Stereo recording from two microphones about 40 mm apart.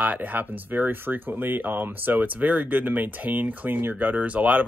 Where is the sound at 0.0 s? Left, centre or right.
Right.